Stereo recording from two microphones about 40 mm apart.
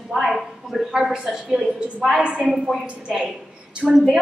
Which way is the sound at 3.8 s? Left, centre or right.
Right.